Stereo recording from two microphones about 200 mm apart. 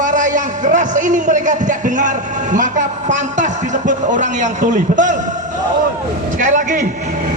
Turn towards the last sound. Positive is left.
turn(degrees=-40)  # may be behind; listen again after turning